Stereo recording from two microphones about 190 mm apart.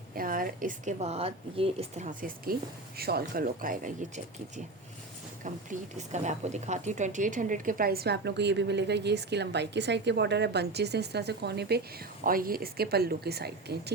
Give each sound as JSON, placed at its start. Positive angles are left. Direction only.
{"t": 0.2, "sound": "a woman's voice", "side_deg": -45}
{"t": 12.2, "sound": "a woman's voice", "side_deg": -50}